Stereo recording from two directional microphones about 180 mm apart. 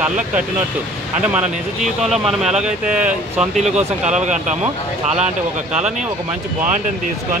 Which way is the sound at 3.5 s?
40° right (ahead or behind).